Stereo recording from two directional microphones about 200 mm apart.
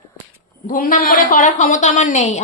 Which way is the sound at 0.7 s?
40° left (ahead or behind).